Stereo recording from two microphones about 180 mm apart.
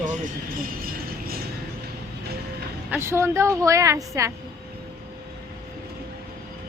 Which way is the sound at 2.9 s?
15° right (ahead or behind).